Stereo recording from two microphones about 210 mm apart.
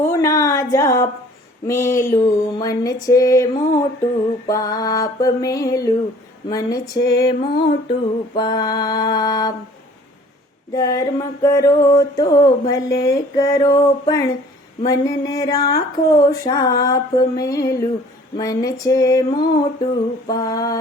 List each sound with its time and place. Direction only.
0.0 s a sound: 15° left (ahead or behind)
1.6 s mantra: 15° left (ahead or behind)
10.8 s mantra: 15° left (ahead or behind)